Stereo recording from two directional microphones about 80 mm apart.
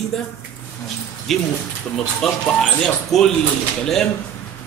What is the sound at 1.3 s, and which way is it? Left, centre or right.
A man's voice, centre.